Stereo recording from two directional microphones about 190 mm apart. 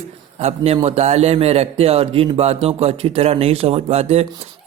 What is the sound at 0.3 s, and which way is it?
A man's voice, 35° right (ahead or behind).